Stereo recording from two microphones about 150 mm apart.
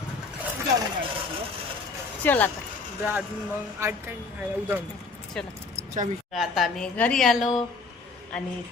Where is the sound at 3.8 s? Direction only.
15° right (ahead or behind).